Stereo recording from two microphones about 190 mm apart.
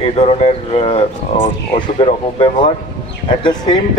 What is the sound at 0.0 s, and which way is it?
A man's voice, 35° left (ahead or behind).